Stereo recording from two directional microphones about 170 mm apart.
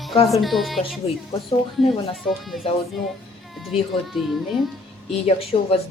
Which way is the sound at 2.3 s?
Centre (ahead or behind).